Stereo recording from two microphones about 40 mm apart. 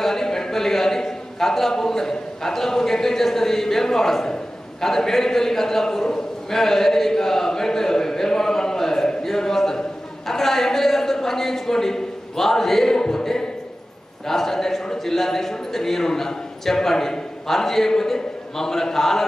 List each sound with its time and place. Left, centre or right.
0.0 s a man's voice: centre